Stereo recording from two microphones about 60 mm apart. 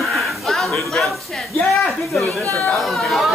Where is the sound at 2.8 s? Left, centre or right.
Centre.